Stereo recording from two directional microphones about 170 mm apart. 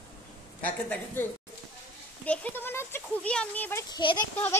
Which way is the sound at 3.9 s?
25° left (ahead or behind).